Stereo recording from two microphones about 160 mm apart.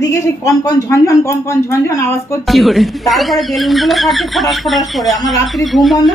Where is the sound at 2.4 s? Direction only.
Centre (ahead or behind).